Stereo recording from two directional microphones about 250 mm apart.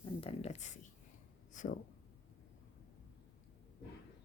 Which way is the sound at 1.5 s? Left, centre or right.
Left.